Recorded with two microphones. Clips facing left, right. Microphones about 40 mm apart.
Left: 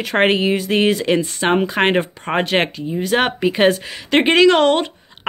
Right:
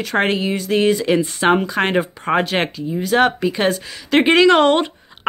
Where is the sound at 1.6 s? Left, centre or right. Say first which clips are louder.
Left 2 dB; left.